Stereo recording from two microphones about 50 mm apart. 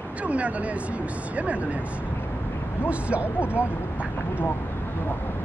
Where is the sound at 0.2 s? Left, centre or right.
Right.